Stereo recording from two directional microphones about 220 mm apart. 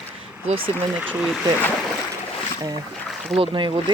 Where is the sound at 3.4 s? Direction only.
25° right (ahead or behind).